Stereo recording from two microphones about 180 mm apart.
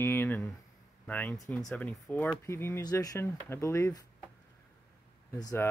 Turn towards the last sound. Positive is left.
turn(degrees=15)  # may be behind; listen again after turning